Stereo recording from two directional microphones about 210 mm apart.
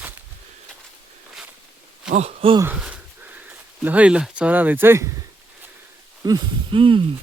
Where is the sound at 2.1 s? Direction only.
30° right (ahead or behind).